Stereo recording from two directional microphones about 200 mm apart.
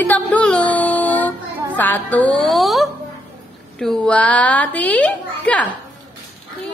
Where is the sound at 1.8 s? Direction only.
10° left (ahead or behind).